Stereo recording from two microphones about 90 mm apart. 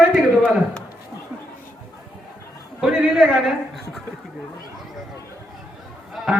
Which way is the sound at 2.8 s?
5° right (ahead or behind).